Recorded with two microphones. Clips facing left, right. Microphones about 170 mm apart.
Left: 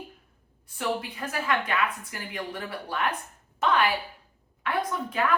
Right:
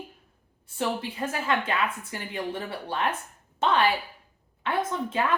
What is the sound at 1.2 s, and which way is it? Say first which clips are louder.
Speech: right 4 dB; 25° right (ahead or behind).